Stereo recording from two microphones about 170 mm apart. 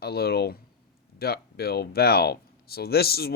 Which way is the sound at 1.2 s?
65° left (ahead or behind).